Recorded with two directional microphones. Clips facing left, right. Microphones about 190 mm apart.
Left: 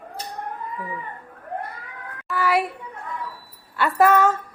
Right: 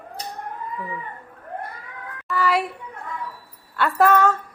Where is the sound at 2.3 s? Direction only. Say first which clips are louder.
Even; 5° left (ahead or behind).